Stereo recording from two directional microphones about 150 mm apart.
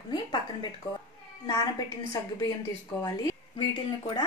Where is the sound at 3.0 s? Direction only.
25° left (ahead or behind).